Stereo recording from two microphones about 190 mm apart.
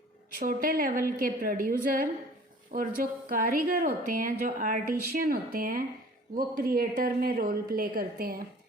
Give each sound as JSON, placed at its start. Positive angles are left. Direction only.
{"t": 0.3, "sound": "a woman's voice", "side_deg": -50}